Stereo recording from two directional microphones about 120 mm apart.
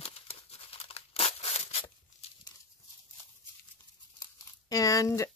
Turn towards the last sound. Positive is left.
turn(degrees=25)  # may be behind; listen again after turning